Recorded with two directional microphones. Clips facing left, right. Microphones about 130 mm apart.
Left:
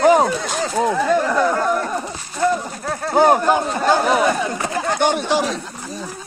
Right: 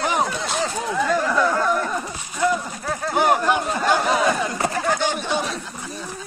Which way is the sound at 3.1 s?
35° left (ahead or behind).